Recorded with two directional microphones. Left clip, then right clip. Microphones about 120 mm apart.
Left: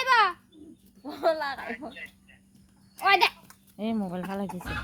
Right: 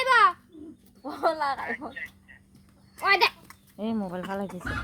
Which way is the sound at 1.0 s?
15° left (ahead or behind).